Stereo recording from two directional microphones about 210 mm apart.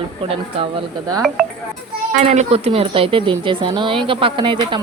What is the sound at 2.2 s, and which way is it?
A woman's voice, 30° right (ahead or behind).